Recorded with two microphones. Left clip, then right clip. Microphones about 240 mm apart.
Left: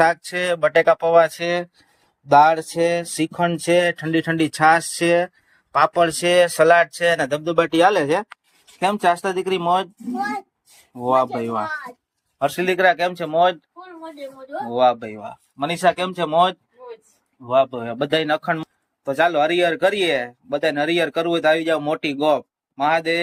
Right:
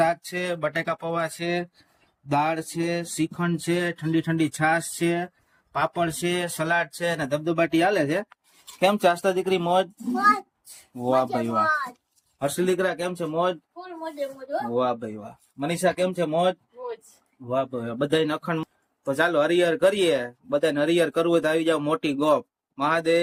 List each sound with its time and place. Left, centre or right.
0.0 s speech: centre
2.8 s a man's voice: centre
11.0 s a man's voice: centre
11.6 s a child's voice: right
12.4 s a man's voice: centre
14.7 s a man's voice: centre